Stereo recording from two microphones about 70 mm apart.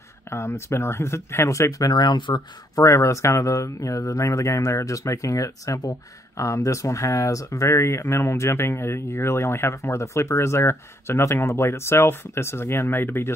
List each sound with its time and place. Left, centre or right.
0.3 s speech: left
2.8 s speech: left